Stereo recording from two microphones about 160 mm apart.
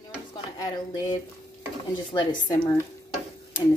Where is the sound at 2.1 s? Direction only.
20° left (ahead or behind).